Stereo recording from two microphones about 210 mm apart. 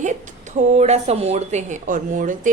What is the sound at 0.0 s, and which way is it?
A woman's voice, 35° right (ahead or behind).